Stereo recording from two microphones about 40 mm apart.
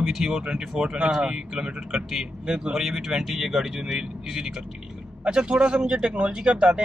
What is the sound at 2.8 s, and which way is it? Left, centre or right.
Speech, centre.